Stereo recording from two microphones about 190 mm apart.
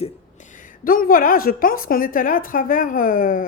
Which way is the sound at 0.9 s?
50° left (ahead or behind).